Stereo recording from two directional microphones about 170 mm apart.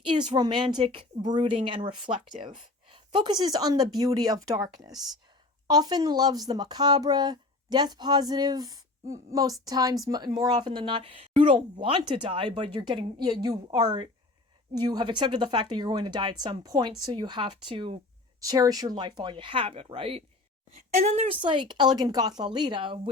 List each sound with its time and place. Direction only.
0.3 s speech: 25° right (ahead or behind)
18.3 s speech: 20° right (ahead or behind)